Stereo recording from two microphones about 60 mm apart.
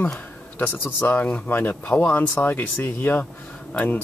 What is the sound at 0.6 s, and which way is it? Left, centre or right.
Speech, left.